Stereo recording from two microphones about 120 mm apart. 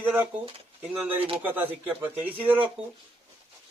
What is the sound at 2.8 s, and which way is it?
Speech, 50° right (ahead or behind).